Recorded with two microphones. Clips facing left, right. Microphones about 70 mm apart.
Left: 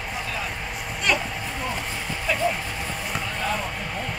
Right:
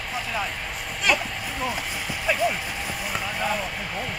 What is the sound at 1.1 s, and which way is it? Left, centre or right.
Speech, centre.